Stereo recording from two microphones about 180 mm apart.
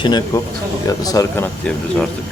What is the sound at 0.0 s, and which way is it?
Speech, 25° left (ahead or behind).